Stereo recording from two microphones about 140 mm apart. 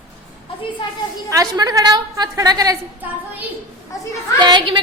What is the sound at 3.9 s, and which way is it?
Speech, 25° left (ahead or behind).